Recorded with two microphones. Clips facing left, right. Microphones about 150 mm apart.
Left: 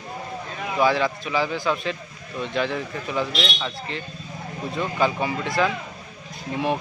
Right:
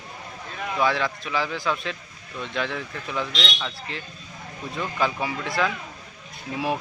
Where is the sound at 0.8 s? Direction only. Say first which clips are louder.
Left 3 dB; centre (ahead or behind).